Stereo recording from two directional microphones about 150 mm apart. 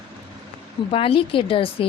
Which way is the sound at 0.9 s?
40° left (ahead or behind).